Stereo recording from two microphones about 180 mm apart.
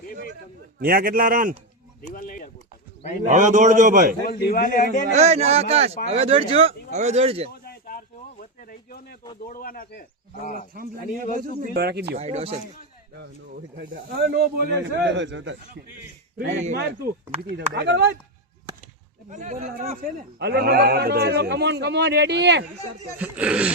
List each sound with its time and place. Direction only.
0.8 s a man's voice: 55° right (ahead or behind)
2.0 s a sound: 50° left (ahead or behind)
3.2 s a man's voice: 45° right (ahead or behind)
4.3 s a man's voice: 60° left (ahead or behind)
5.1 s speech: 35° right (ahead or behind)
7.5 s a sound: 55° left (ahead or behind)
9.5 s speech: 50° left (ahead or behind)
11.4 s speech: 55° right (ahead or behind)
12.1 s speech: 35° right (ahead or behind)
13.7 s a man's voice: 60° right (ahead or behind); by 16.6 s 90° right
16.7 s a man's voice: 65° right (ahead or behind)
19.3 s speech: 40° right (ahead or behind)
20.4 s a man's voice: 65° right (ahead or behind)
23.1 s speech: 10° right (ahead or behind)